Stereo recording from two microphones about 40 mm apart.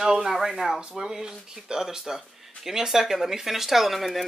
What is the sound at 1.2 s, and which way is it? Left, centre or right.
Speech, centre.